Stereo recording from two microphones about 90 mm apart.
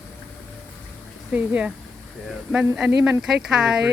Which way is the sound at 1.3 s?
10° right (ahead or behind).